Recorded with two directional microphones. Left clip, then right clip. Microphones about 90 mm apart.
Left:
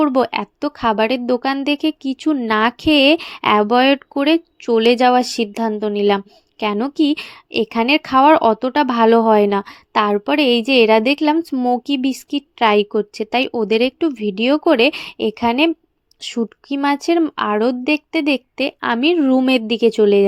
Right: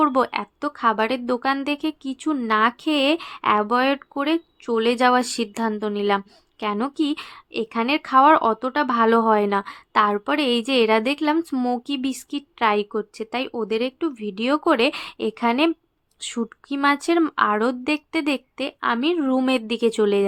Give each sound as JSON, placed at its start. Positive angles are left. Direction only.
{"t": 0.0, "sound": "a woman's voice", "side_deg": 35}
{"t": 2.5, "sound": "a woman's voice", "side_deg": 60}
{"t": 3.6, "sound": "speech", "side_deg": 50}
{"t": 5.0, "sound": "a woman's voice", "side_deg": 30}
{"t": 11.5, "sound": "speech", "side_deg": 10}
{"t": 11.9, "sound": "speech", "side_deg": 35}
{"t": 14.1, "sound": "a woman's voice", "side_deg": 45}
{"t": 17.3, "sound": "a woman's voice", "side_deg": 35}
{"t": 18.5, "sound": "speech", "side_deg": 60}
{"t": 19.6, "sound": "a woman's voice", "side_deg": 35}